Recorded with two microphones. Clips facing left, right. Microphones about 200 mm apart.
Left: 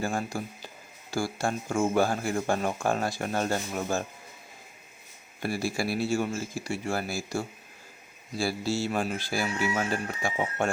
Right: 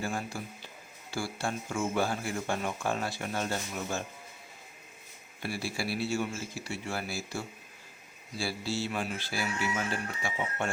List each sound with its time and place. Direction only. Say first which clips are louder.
0.0 s speech: left 5 dB; 45° left (ahead or behind)
5.4 s speech: left 6 dB; 45° left (ahead or behind)
8.4 s speech: left 5 dB; 45° left (ahead or behind)